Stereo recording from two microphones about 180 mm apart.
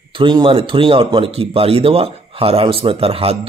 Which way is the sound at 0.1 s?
25° right (ahead or behind).